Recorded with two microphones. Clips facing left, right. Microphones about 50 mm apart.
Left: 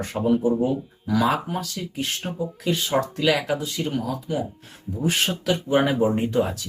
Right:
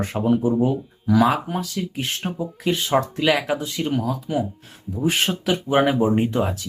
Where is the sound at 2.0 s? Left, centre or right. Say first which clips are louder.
Left 2 dB; right.